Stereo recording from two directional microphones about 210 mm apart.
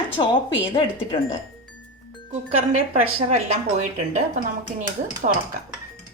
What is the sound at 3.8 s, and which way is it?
Speech, 35° right (ahead or behind).